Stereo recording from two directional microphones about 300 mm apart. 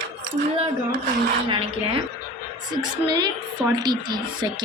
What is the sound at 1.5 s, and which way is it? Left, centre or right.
A woman's voice, centre.